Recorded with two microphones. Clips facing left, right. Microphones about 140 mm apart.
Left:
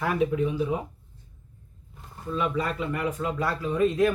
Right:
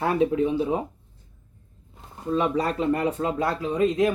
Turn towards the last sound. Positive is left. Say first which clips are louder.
# right 1 dB
turn(degrees=-20)  # may be behind; listen again after turning